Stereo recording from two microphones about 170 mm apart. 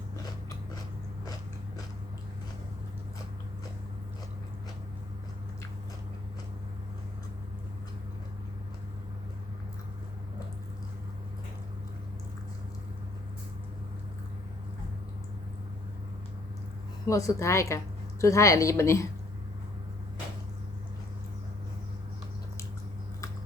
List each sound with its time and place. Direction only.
17.1 s a woman's voice: 20° left (ahead or behind)